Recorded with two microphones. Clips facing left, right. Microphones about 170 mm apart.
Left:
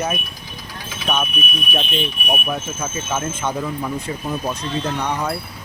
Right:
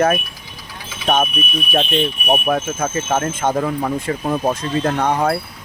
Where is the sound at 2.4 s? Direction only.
55° right (ahead or behind).